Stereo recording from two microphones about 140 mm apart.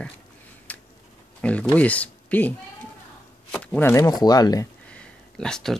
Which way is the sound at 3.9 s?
30° left (ahead or behind).